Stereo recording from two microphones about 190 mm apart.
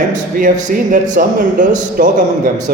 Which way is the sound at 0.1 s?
40° right (ahead or behind).